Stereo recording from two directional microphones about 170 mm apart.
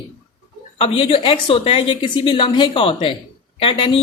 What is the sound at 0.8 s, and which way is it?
Speech, 30° left (ahead or behind).